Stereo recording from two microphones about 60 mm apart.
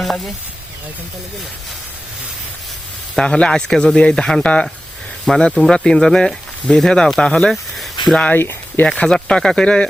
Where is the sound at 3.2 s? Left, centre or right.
Centre.